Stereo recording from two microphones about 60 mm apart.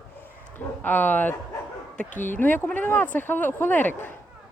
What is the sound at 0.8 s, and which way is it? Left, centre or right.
A woman's voice, left.